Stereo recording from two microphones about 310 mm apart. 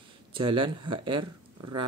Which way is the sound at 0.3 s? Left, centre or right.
Centre.